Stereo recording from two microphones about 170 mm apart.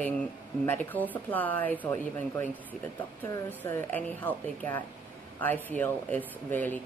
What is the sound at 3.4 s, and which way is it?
Speech, 15° left (ahead or behind).